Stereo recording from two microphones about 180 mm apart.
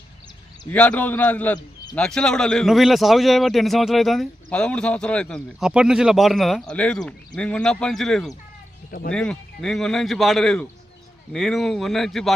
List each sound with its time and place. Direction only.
0.7 s a man's voice: 10° left (ahead or behind)
1.5 s bird: 20° left (ahead or behind)
2.0 s a man's voice: 5° left (ahead or behind)